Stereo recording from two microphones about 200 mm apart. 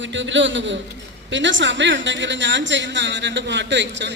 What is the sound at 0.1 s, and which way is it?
A man's voice, 65° right (ahead or behind).